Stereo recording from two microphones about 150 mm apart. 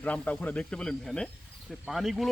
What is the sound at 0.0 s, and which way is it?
Speech, 10° left (ahead or behind).